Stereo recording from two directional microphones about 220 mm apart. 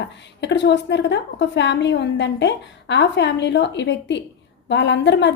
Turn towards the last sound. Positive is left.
turn(degrees=55)  # may be behind; listen again after turning